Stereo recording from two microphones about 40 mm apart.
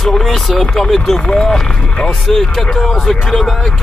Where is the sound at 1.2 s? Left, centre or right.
Centre.